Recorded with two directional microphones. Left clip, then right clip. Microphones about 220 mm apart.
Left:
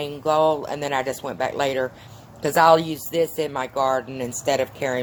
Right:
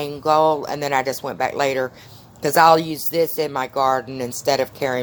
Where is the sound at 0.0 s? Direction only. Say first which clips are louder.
Right 3 dB; 25° right (ahead or behind).